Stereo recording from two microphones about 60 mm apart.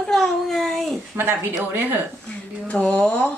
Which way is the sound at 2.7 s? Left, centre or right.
Centre.